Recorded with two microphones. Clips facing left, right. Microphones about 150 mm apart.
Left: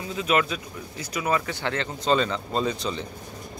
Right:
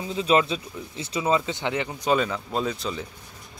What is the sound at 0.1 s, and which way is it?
Speech, 30° right (ahead or behind).